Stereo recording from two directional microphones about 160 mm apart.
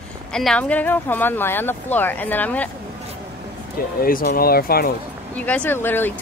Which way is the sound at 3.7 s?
65° left (ahead or behind).